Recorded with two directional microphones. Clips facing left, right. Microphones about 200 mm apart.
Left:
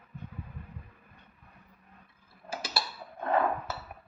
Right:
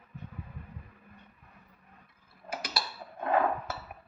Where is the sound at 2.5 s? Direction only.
25° left (ahead or behind).